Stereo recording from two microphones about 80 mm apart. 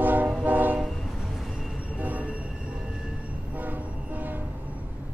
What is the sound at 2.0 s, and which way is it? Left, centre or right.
Train, centre.